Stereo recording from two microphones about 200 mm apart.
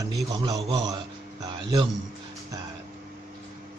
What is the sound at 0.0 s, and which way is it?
Speech, 15° right (ahead or behind).